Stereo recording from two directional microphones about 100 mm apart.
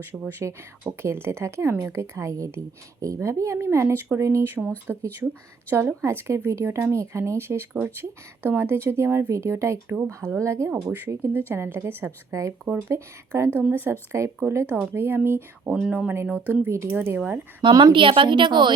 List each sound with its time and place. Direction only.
0.0 s speech: 20° right (ahead or behind)
15.7 s speech: 10° right (ahead or behind); by 17.2 s 25° right (ahead or behind)
17.2 s speech: 15° right (ahead or behind)
17.6 s a woman's voice: 50° right (ahead or behind)